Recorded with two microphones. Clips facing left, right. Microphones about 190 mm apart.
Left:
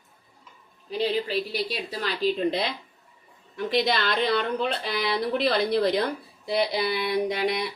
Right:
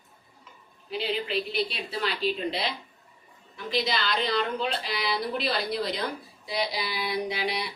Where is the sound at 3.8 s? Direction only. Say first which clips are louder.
Left 3 dB; 55° left (ahead or behind).